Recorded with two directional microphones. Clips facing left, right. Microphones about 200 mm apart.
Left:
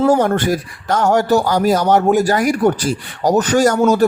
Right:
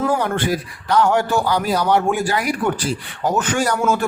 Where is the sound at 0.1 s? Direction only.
40° left (ahead or behind).